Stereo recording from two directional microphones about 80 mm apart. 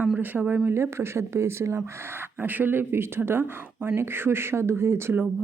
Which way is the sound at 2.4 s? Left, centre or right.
Right.